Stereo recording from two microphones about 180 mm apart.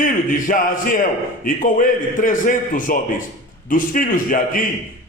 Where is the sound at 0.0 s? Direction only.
50° left (ahead or behind).